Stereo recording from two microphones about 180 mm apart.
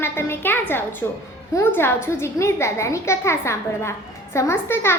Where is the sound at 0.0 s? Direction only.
15° left (ahead or behind).